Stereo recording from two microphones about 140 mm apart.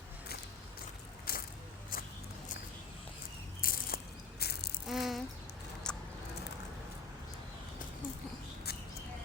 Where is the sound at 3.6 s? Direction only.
90° left.